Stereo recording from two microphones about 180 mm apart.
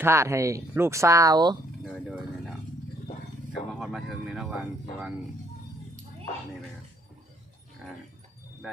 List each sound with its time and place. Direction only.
0.0 s speech: 15° right (ahead or behind)
1.8 s a sound: centre (ahead or behind)
3.8 s speech: centre (ahead or behind)